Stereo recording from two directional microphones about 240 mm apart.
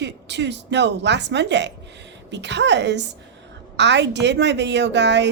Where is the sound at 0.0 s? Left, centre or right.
Right.